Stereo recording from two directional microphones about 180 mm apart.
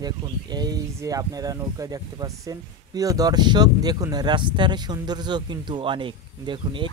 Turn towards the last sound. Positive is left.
turn(degrees=-25)  # may be behind; listen again after turning